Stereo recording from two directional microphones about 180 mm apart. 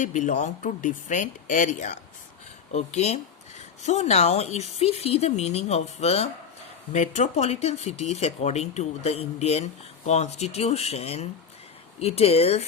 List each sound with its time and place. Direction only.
0.0 s speech: 45° left (ahead or behind)